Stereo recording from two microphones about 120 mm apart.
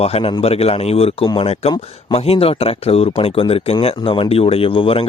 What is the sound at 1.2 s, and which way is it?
Speech, 35° left (ahead or behind).